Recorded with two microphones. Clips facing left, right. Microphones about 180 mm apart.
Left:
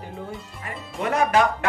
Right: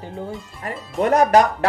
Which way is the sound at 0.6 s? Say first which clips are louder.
Right 7 dB; 40° right (ahead or behind).